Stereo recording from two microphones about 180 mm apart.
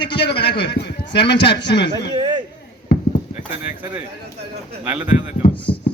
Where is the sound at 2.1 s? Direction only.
25° right (ahead or behind).